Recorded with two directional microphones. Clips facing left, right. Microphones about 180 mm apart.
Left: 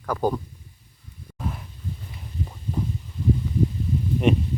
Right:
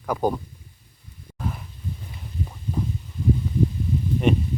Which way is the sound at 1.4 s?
Centre (ahead or behind).